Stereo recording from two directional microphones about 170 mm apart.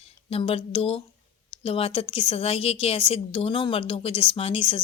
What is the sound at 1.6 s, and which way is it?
A woman's voice, 35° left (ahead or behind).